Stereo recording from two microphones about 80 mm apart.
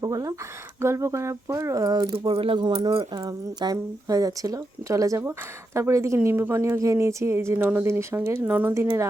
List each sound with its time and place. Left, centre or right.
0.0 s speech: right
0.8 s speech: right
1.8 s speech: right
8.4 s speech: centre
8.7 s speech: right